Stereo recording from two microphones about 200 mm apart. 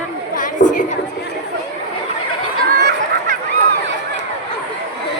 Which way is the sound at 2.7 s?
60° right (ahead or behind).